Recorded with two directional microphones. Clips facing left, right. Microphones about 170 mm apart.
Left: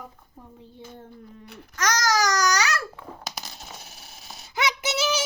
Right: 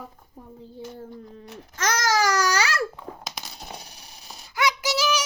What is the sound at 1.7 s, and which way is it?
Baby cry, 30° right (ahead or behind).